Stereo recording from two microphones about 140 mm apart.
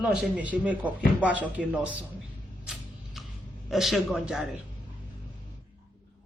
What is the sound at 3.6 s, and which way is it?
Speech, centre (ahead or behind).